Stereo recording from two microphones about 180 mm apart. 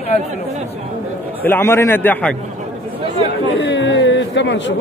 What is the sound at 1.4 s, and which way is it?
Speech, 10° left (ahead or behind).